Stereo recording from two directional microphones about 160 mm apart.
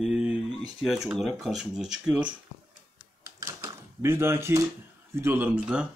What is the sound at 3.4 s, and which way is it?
Typewriter, 15° right (ahead or behind).